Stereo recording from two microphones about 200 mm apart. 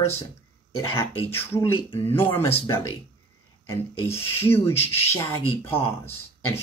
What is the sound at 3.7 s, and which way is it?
Speech, 15° left (ahead or behind).